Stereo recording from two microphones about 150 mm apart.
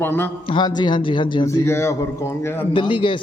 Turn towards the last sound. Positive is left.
turn(degrees=35)  # may be behind; listen again after turning